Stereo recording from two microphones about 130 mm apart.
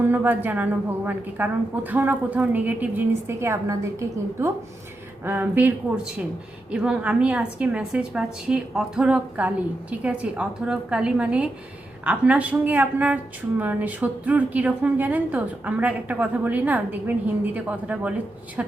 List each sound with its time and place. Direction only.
0.0 s a woman's voice: 15° right (ahead or behind)